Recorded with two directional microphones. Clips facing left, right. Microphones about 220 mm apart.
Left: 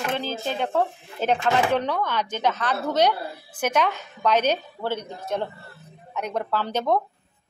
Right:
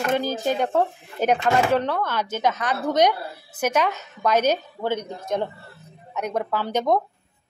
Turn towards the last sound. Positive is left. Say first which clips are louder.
# right 2 dB
turn(degrees=-15)  # may be behind; listen again after turning